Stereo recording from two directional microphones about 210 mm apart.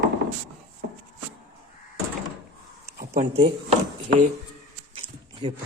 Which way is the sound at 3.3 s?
30° right (ahead or behind).